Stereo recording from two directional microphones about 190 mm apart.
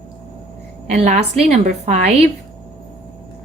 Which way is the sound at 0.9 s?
35° right (ahead or behind).